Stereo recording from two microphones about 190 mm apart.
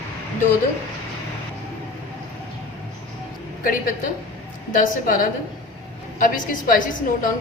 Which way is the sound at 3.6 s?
45° left (ahead or behind).